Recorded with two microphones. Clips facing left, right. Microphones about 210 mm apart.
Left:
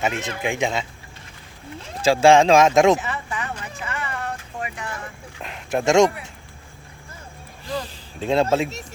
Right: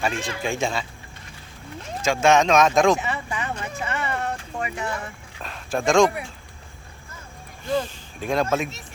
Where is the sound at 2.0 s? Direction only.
30° left (ahead or behind).